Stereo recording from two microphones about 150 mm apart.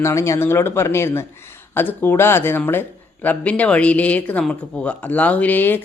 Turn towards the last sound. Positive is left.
turn(degrees=10)  # may be behind; listen again after turning